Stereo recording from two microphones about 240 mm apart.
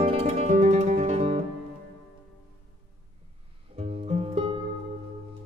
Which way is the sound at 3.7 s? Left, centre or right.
Right.